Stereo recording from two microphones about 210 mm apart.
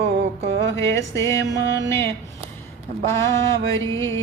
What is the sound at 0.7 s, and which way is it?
Speech, 15° left (ahead or behind).